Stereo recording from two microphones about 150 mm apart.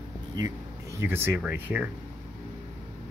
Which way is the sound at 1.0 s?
15° right (ahead or behind).